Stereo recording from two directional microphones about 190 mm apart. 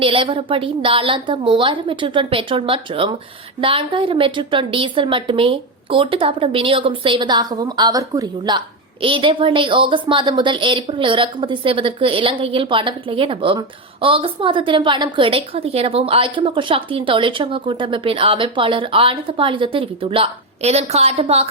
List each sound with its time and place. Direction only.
0.0 s a woman's voice: 30° right (ahead or behind)